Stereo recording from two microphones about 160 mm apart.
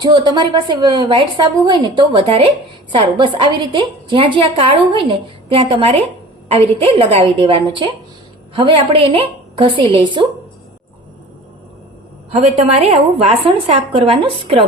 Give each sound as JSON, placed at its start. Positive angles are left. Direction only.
{"t": 0.0, "sound": "a woman's voice", "side_deg": -25}
{"t": 12.3, "sound": "a woman's voice", "side_deg": -40}